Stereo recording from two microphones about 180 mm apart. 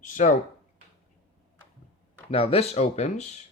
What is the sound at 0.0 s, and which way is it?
Speech, 45° left (ahead or behind).